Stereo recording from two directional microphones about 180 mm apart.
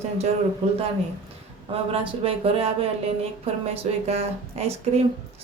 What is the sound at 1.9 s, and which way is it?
Speech, 30° right (ahead or behind).